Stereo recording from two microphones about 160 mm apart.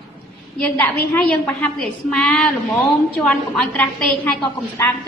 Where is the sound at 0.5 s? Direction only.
10° left (ahead or behind).